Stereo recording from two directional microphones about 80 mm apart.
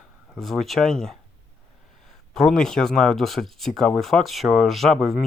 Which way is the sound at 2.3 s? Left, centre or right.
Centre.